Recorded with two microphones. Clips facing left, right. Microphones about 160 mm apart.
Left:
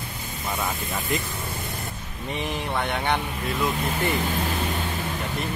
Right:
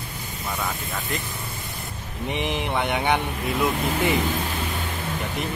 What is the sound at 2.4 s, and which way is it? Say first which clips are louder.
Speech: right 2 dB; 15° right (ahead or behind).